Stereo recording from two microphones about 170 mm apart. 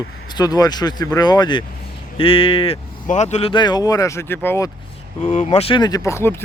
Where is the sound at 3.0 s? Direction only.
45° left (ahead or behind); by 4.7 s 15° left (ahead or behind).